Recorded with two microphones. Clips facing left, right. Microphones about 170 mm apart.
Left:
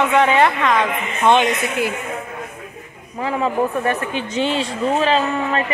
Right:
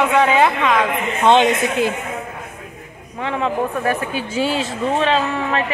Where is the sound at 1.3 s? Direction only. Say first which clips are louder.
Right 2 dB; 20° right (ahead or behind).